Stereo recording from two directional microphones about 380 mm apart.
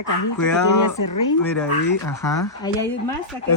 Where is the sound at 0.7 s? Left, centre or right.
Left.